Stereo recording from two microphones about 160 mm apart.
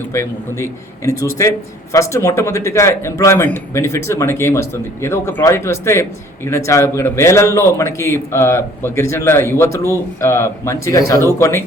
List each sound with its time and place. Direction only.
0.1 s a man's voice: 20° left (ahead or behind)